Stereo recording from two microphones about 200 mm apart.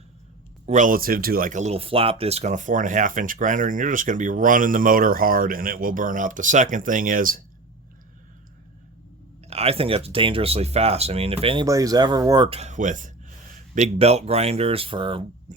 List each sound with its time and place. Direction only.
0.6 s speech: 40° right (ahead or behind)
9.5 s speech: 30° right (ahead or behind)
15.5 s speech: 35° right (ahead or behind)